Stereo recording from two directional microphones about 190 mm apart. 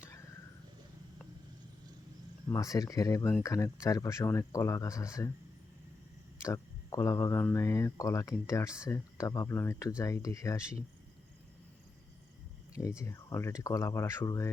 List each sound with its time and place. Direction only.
2.5 s speech: 15° left (ahead or behind)
6.4 s speech: 15° left (ahead or behind)
13.0 s speech: 15° left (ahead or behind)